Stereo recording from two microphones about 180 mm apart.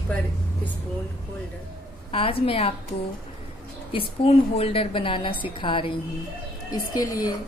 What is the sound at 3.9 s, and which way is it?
A woman's voice, 30° left (ahead or behind).